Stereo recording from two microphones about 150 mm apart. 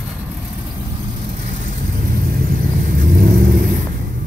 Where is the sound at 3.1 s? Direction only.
80° right.